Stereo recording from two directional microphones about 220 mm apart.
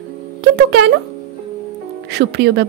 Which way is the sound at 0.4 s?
50° right (ahead or behind).